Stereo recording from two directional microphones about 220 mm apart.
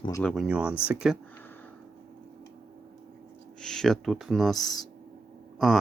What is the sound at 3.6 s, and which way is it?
Speech, centre (ahead or behind).